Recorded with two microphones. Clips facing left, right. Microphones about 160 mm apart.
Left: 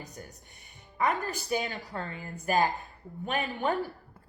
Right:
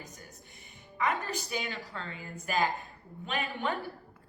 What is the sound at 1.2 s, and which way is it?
A woman's voice, 40° left (ahead or behind).